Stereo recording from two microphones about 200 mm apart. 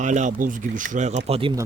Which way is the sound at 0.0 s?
40° right (ahead or behind).